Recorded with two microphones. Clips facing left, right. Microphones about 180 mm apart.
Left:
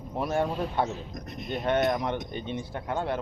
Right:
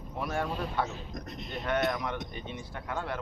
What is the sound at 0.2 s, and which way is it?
Speech, 25° left (ahead or behind).